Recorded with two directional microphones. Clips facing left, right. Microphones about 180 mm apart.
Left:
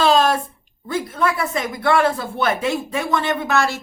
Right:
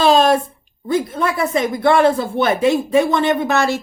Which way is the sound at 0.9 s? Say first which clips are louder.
Right 3 dB; 20° right (ahead or behind).